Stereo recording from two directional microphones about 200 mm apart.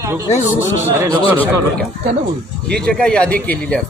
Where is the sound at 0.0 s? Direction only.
15° right (ahead or behind).